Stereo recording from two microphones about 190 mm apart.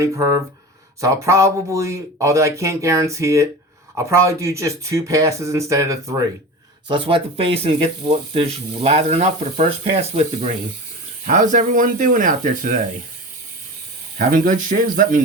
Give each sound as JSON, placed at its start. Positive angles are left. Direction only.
{"t": 0.0, "sound": "speech", "side_deg": -15}
{"t": 14.2, "sound": "speech", "side_deg": -50}